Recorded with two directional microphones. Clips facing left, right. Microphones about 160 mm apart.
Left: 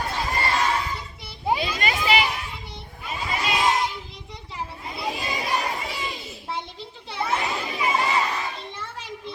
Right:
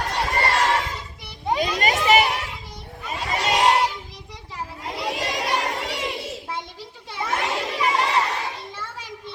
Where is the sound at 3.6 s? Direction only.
75° right (ahead or behind).